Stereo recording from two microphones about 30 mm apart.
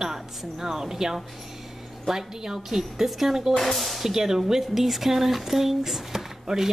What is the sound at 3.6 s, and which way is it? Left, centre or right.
Speech, centre.